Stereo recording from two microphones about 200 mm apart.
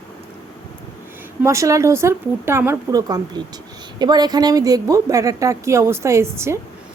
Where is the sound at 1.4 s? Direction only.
15° right (ahead or behind).